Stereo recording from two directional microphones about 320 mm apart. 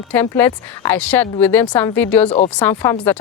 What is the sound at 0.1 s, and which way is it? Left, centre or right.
A woman's voice, centre.